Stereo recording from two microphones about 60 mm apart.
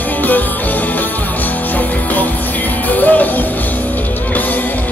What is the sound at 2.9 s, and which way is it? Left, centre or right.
Music, left.